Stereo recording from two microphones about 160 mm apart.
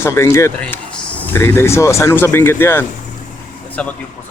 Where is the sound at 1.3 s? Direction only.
15° left (ahead or behind).